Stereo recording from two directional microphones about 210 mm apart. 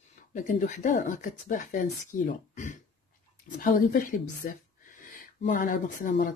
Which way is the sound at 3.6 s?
40° left (ahead or behind).